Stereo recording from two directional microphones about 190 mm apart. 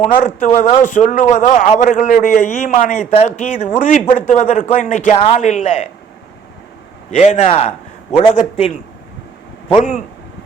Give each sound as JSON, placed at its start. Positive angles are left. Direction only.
{"t": 0.2, "sound": "a man's voice", "side_deg": 40}
{"t": 7.1, "sound": "a man's voice", "side_deg": 35}